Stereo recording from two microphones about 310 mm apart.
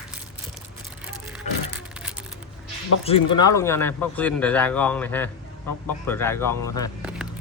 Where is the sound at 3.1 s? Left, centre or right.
Centre.